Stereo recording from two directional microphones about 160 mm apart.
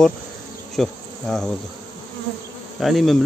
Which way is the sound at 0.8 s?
Centre (ahead or behind).